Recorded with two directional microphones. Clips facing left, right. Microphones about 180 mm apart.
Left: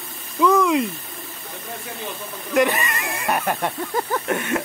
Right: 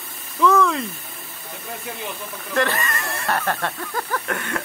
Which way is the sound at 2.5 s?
15° left (ahead or behind).